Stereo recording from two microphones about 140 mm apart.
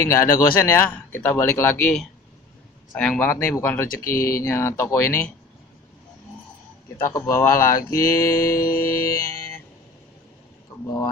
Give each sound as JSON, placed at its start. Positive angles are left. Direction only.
{"t": 0.0, "sound": "speech", "side_deg": 20}
{"t": 3.0, "sound": "speech", "side_deg": 15}
{"t": 7.0, "sound": "speech", "side_deg": 20}